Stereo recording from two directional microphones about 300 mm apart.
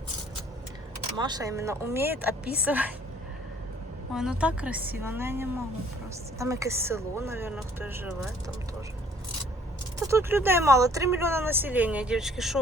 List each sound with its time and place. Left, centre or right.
1.1 s speech: centre
4.1 s a woman's voice: centre
10.0 s speech: centre